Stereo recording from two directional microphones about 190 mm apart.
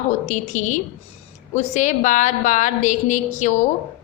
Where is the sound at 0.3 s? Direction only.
40° left (ahead or behind).